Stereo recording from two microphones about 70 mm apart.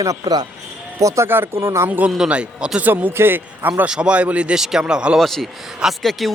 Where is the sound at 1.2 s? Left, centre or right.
Right.